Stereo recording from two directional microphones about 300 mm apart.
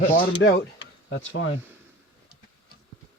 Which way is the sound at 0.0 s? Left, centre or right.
Left.